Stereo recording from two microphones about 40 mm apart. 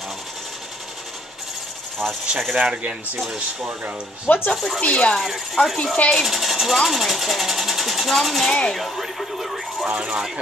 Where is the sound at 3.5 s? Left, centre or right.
Centre.